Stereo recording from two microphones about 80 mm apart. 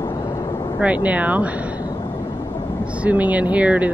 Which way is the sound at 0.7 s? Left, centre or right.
Centre.